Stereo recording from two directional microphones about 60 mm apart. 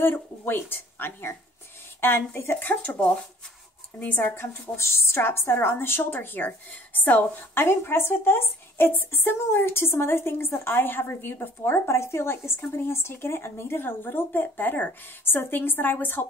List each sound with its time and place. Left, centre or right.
0.0 s a woman's voice: left
2.7 s speech: left
4.4 s a woman's voice: left